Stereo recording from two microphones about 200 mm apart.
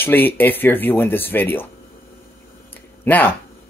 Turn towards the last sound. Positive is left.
turn(degrees=10)  # may be behind; listen again after turning